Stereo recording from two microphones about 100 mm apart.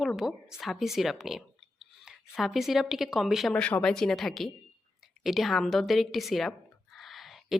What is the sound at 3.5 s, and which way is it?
A woman's voice, 10° left (ahead or behind).